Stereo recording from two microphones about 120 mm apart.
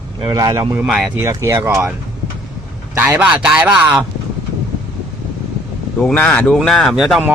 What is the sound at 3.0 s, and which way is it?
Speech, 15° right (ahead or behind).